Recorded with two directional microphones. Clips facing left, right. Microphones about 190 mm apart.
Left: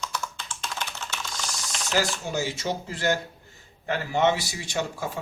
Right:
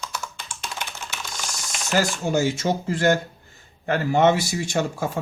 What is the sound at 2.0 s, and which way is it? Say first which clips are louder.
Speech: right 5 dB; 50° right (ahead or behind).